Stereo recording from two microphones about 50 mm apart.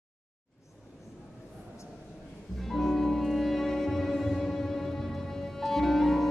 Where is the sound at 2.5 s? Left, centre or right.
Centre.